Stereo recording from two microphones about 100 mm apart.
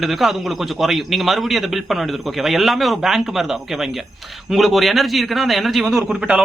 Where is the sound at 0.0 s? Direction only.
Centre (ahead or behind).